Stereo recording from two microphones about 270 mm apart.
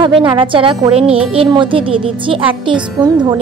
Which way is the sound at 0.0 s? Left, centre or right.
Centre.